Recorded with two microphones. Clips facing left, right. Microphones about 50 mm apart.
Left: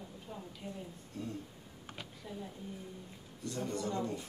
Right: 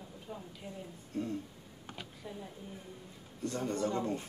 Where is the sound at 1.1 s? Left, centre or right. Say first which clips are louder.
Right 6 dB; right.